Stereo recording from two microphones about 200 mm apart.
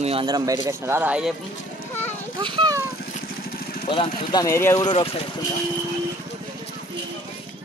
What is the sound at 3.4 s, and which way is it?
Vehicle, 45° left (ahead or behind).